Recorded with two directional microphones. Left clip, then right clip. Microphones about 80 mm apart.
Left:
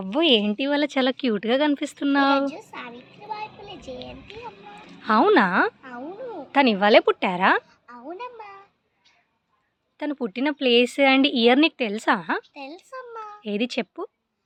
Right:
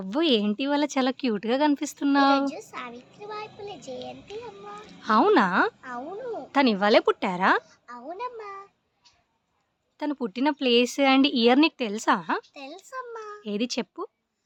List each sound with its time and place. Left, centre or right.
0.0 s speech: centre
2.5 s a sound: right
3.2 s child singing: right
4.9 s speech: centre
8.0 s a sound: right
10.0 s speech: centre
12.5 s a child's voice: right
13.4 s speech: centre